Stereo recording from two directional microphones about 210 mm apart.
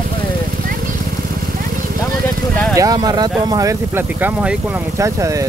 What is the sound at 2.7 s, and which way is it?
Speech, 15° right (ahead or behind).